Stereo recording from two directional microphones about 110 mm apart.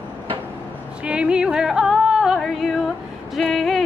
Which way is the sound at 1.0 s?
10° right (ahead or behind).